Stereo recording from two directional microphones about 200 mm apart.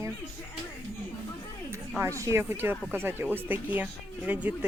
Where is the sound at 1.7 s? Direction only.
15° right (ahead or behind).